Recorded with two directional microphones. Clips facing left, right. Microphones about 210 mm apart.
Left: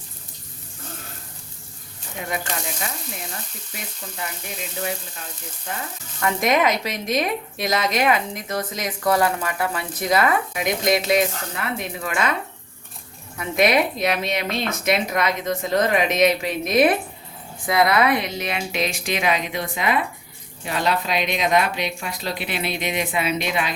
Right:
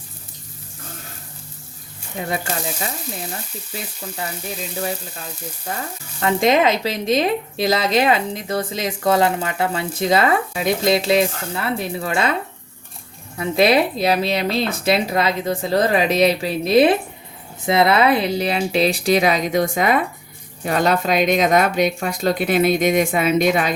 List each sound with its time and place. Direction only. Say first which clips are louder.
4.8 s speech: right 1 dB; 35° right (ahead or behind)
6.1 s speech: right 4 dB; 25° right (ahead or behind); by 23.7 s 45° right (ahead or behind)